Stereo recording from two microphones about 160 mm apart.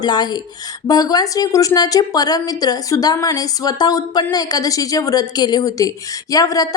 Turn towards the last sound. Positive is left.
turn(degrees=20)  # may be behind; listen again after turning